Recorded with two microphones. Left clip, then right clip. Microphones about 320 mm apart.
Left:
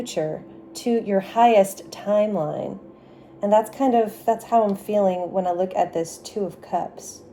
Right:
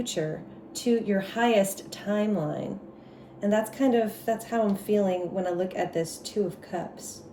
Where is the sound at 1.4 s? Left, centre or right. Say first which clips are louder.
Left 8 dB; left.